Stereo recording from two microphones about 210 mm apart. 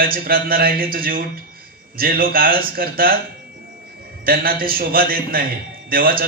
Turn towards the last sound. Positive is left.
turn(degrees=-45)  # may be behind; listen again after turning